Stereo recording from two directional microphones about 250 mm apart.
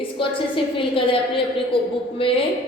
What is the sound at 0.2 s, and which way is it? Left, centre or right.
A woman's voice, left.